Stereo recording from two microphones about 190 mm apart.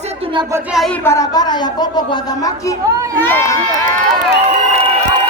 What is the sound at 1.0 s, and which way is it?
Speech, 15° left (ahead or behind).